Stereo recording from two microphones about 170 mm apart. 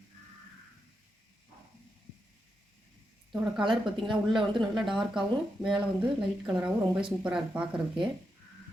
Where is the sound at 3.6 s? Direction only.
30° right (ahead or behind).